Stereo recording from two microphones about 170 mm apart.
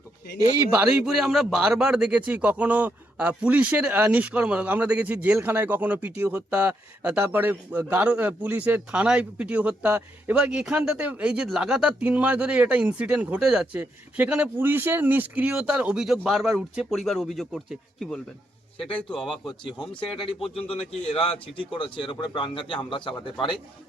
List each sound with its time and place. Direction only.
0.8 s a man's voice: 5° right (ahead or behind)
19.5 s a man's voice: 30° left (ahead or behind)